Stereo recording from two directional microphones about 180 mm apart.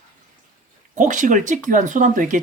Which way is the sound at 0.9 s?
45° right (ahead or behind).